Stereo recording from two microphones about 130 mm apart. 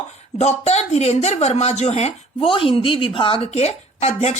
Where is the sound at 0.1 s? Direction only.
55° left (ahead or behind).